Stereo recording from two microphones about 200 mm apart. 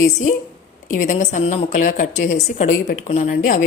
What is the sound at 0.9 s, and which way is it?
Speech, 40° left (ahead or behind).